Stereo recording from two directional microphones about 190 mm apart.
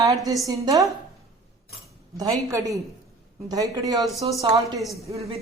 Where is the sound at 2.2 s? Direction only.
15° right (ahead or behind).